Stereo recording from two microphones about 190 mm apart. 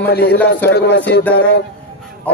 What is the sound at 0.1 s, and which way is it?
Speech, 55° left (ahead or behind).